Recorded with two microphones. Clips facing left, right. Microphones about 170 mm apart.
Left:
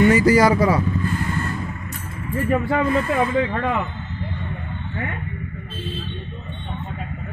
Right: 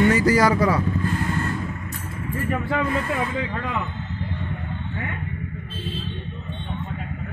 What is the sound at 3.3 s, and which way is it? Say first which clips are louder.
Speech: left 6 dB; 55° left (ahead or behind).